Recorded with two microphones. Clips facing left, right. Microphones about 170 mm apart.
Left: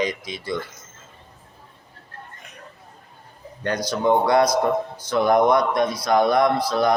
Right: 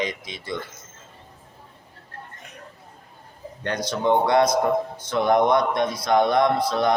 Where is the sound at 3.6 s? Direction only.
25° right (ahead or behind).